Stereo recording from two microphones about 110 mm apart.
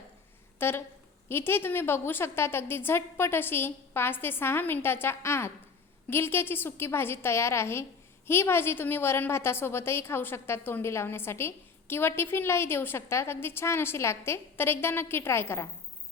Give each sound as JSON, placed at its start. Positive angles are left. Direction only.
{"t": 0.6, "sound": "a woman's voice", "side_deg": 20}